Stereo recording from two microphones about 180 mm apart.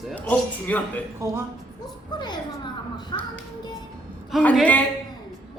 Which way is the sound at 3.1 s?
25° left (ahead or behind).